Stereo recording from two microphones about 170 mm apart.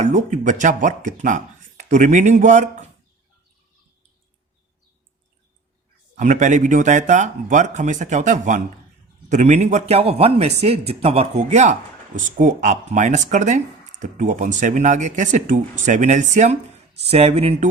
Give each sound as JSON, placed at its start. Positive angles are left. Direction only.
{"t": 0.0, "sound": "speech", "side_deg": -45}
{"t": 6.1, "sound": "speech", "side_deg": -45}